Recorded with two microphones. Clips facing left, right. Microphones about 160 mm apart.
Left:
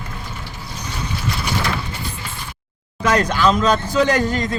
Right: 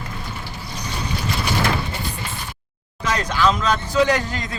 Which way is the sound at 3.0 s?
55° left (ahead or behind).